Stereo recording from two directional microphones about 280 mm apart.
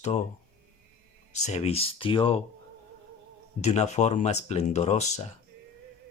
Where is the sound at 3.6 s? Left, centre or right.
Left.